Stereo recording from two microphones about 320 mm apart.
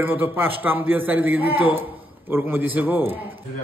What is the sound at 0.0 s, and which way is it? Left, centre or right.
A man's voice, centre.